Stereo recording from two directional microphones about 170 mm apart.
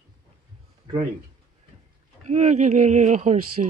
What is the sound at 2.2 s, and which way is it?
Speech, 45° right (ahead or behind).